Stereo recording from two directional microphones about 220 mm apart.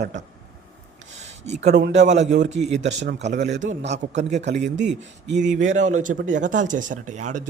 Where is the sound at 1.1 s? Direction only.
30° right (ahead or behind).